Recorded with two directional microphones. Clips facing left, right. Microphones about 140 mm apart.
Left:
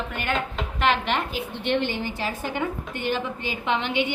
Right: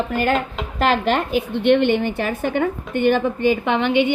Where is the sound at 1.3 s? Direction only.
60° right (ahead or behind).